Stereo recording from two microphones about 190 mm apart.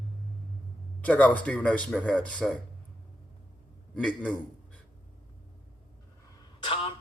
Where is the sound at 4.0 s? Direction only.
5° left (ahead or behind).